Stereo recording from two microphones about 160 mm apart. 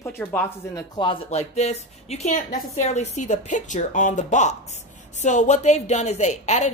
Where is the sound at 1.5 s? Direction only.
40° left (ahead or behind).